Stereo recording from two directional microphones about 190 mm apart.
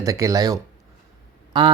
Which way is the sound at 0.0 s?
15° right (ahead or behind).